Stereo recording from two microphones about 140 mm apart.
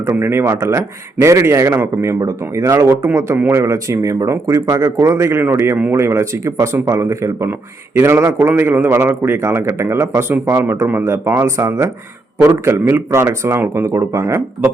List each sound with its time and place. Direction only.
0.0 s a man's voice: 15° right (ahead or behind)